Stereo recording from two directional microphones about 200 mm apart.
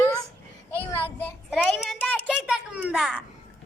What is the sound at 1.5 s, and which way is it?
Child singing, centre (ahead or behind).